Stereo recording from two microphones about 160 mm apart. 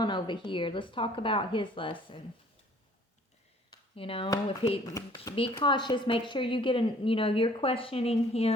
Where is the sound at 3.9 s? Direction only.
35° left (ahead or behind).